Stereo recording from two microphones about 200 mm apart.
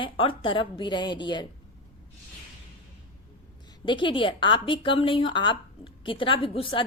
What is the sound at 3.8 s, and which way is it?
Speech, 25° left (ahead or behind).